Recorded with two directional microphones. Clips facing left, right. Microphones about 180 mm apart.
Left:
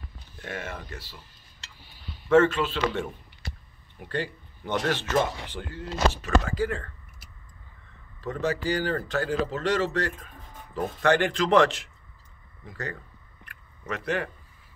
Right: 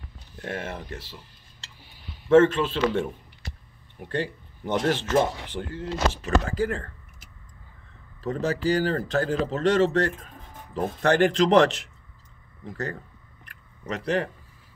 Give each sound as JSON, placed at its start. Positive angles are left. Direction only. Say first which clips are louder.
{"t": 0.4, "sound": "speech", "louder": "right 3 dB", "side_deg": -30}
{"t": 2.2, "sound": "speech", "louder": "right 3 dB", "side_deg": -30}
{"t": 4.1, "sound": "speech", "louder": "right 2 dB", "side_deg": -25}
{"t": 6.5, "sound": "speech", "louder": "right 2 dB", "side_deg": -45}
{"t": 8.2, "sound": "speech", "louder": "right 2 dB", "side_deg": -35}
{"t": 13.5, "sound": "a sound", "louder": "right 2 dB", "side_deg": -35}